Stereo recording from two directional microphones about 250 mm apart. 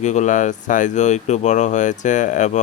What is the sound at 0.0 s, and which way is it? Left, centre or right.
Speech, left.